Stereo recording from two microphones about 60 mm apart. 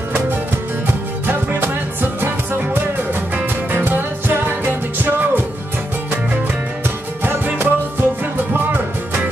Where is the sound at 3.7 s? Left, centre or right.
Right.